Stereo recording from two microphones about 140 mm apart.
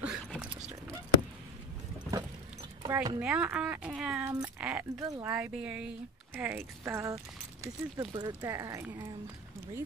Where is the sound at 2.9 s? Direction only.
25° right (ahead or behind).